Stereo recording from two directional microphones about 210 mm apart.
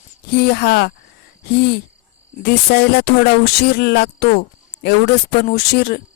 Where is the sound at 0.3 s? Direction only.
50° left (ahead or behind).